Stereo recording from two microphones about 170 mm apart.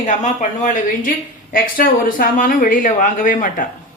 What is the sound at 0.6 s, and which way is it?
Speech, 50° left (ahead or behind).